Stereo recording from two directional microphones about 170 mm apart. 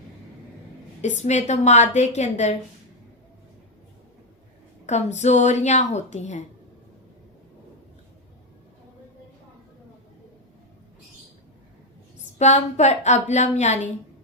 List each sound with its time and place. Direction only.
1.0 s a woman's voice: 40° left (ahead or behind)
4.9 s a woman's voice: 40° left (ahead or behind)
12.4 s a woman's voice: 40° left (ahead or behind)